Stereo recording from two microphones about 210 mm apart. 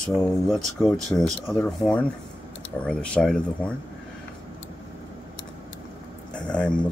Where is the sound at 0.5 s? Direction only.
Centre (ahead or behind).